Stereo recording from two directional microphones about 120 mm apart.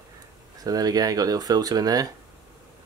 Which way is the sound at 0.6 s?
30° right (ahead or behind).